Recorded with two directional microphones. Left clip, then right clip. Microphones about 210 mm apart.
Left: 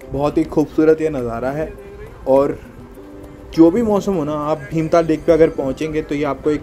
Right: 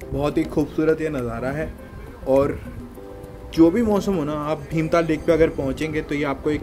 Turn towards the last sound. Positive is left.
turn(degrees=5)  # may be behind; listen again after turning